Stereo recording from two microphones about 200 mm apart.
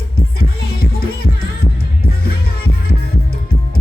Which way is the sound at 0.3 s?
50° left (ahead or behind).